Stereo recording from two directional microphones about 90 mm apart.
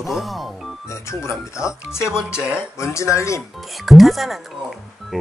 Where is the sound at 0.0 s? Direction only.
Centre (ahead or behind).